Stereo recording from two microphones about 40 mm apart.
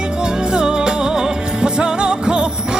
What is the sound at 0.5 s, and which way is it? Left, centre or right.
Music, centre.